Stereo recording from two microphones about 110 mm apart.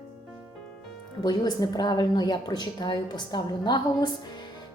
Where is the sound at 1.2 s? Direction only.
35° left (ahead or behind).